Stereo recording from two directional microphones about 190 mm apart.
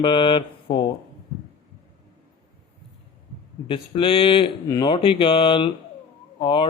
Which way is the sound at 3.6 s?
25° left (ahead or behind).